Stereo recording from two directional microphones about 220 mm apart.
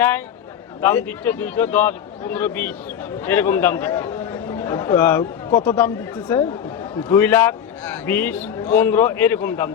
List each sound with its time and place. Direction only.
0.8 s a man's voice: 10° left (ahead or behind)